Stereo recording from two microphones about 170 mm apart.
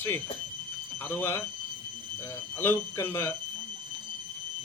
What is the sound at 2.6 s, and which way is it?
Speech, 15° left (ahead or behind).